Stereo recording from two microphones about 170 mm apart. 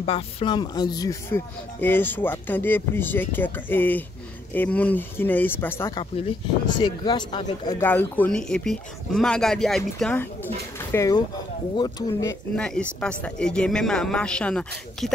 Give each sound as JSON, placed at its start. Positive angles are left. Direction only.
{"t": 0.0, "sound": "speech", "side_deg": 35}
{"t": 6.8, "sound": "speech", "side_deg": 25}
{"t": 7.8, "sound": "speech", "side_deg": 10}
{"t": 10.1, "sound": "speech", "side_deg": 10}
{"t": 12.5, "sound": "speech", "side_deg": 5}